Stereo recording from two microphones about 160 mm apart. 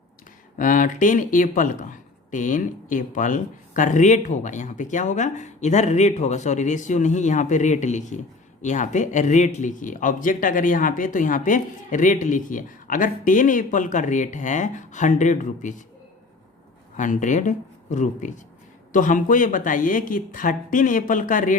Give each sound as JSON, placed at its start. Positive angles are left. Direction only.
{"t": 0.5, "sound": "speech", "side_deg": 55}
{"t": 17.0, "sound": "speech", "side_deg": 50}